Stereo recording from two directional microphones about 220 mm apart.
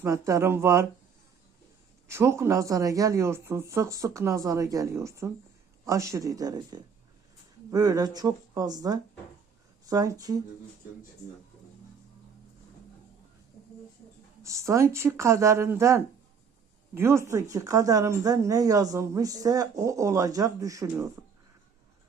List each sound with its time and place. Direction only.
0.0 s speech: 15° right (ahead or behind)
2.0 s speech: 15° right (ahead or behind)
14.4 s speech: 15° right (ahead or behind)